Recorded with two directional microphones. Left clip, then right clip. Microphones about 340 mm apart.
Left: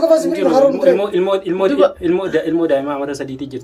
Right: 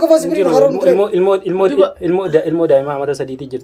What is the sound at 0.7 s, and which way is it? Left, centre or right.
A man's voice, centre.